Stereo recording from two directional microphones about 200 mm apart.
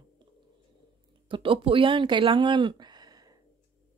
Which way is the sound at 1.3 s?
25° right (ahead or behind).